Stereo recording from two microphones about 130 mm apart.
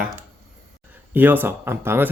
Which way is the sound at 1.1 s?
15° right (ahead or behind).